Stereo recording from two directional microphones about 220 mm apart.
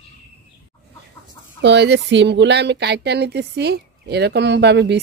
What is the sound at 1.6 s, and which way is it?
Speech, 50° right (ahead or behind).